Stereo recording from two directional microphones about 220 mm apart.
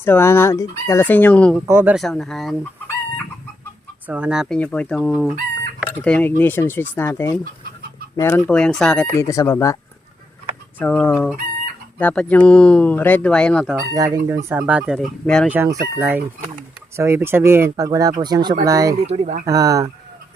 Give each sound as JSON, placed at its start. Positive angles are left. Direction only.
{"t": 0.0, "sound": "speech", "side_deg": 10}
{"t": 1.6, "sound": "speech", "side_deg": -10}
{"t": 4.0, "sound": "speech", "side_deg": -5}
{"t": 10.8, "sound": "speech", "side_deg": 5}
{"t": 13.9, "sound": "speech", "side_deg": -15}
{"t": 15.5, "sound": "speech", "side_deg": -10}
{"t": 18.9, "sound": "speech", "side_deg": -30}
{"t": 19.5, "sound": "speech", "side_deg": -15}